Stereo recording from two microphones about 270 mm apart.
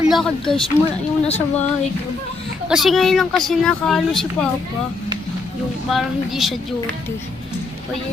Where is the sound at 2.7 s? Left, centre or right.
Centre.